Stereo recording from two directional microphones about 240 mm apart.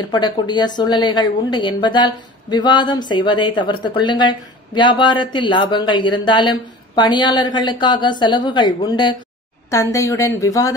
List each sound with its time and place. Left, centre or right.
0.1 s a woman's voice: centre